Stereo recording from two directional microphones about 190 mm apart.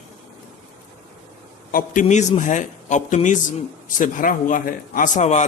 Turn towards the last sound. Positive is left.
turn(degrees=40)  # may be behind; listen again after turning